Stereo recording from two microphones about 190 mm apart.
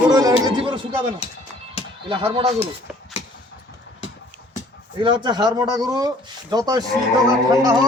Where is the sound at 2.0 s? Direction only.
25° right (ahead or behind).